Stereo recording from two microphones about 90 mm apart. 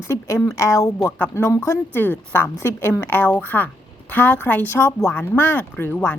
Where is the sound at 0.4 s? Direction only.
35° left (ahead or behind).